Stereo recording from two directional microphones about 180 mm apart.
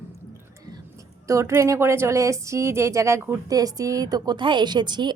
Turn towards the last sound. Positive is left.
turn(degrees=-25)  # may be behind; listen again after turning